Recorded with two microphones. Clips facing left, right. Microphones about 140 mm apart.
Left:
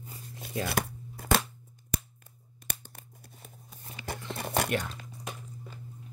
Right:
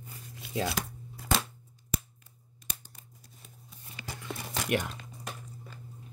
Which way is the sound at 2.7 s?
65° left (ahead or behind).